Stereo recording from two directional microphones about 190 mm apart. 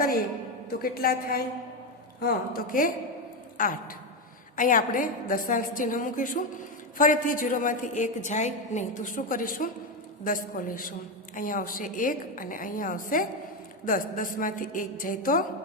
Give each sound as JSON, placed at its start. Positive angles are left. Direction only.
{"t": 0.7, "sound": "a woman's voice", "side_deg": 50}